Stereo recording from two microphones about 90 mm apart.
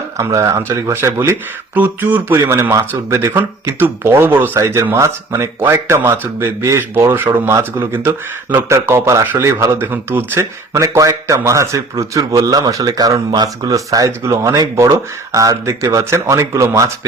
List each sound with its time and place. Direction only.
0.2 s speech: 35° right (ahead or behind)
1.7 s speech: 20° right (ahead or behind)
2.5 s speech: 30° right (ahead or behind)
9.9 s speech: 25° right (ahead or behind)